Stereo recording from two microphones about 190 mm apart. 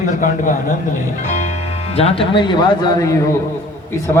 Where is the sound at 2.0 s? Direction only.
30° left (ahead or behind).